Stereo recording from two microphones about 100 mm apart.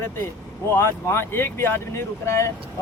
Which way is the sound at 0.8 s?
25° left (ahead or behind).